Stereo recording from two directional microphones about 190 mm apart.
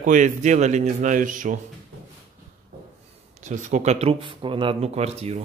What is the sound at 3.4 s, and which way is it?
Speech, 40° right (ahead or behind).